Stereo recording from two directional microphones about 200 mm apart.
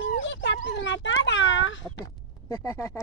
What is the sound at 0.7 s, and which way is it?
Children playing, 65° left (ahead or behind).